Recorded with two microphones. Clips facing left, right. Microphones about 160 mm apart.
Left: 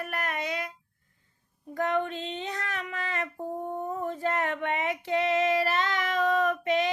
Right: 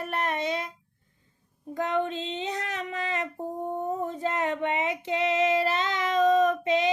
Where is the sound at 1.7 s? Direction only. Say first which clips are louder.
Right 1 dB; 20° right (ahead or behind).